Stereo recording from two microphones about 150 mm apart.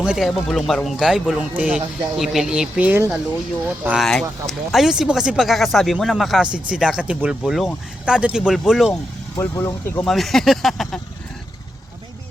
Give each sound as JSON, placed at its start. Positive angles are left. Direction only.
{"t": 0.0, "sound": "a man's voice", "side_deg": -5}
{"t": 3.8, "sound": "a man's voice", "side_deg": 0}
{"t": 9.4, "sound": "speech", "side_deg": 15}
{"t": 10.1, "sound": "a man's voice", "side_deg": 0}